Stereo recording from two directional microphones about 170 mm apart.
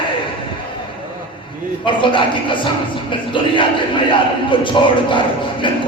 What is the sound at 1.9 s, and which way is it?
Speech, 30° left (ahead or behind).